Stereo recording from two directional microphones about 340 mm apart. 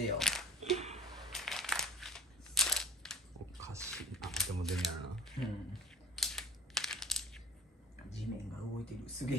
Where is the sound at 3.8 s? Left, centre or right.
Centre.